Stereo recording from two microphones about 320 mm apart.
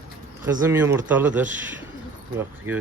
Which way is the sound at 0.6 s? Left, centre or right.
Centre.